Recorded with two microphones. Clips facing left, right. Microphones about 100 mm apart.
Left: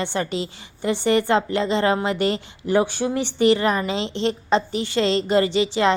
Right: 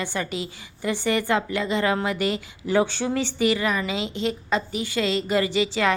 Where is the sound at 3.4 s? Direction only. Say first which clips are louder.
Left 7 dB; 30° left (ahead or behind).